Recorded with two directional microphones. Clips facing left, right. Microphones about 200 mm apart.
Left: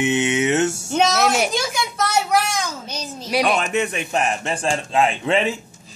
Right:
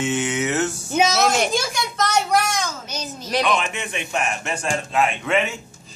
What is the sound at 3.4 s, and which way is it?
A man's voice, 40° left (ahead or behind).